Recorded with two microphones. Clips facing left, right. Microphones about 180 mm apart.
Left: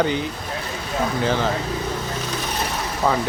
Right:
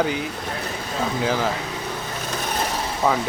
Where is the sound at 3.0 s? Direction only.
5° right (ahead or behind).